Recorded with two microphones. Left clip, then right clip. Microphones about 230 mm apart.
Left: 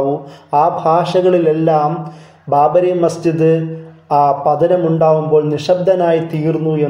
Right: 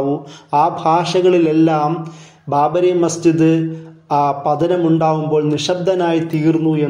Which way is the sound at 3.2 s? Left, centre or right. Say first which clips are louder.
Even; right.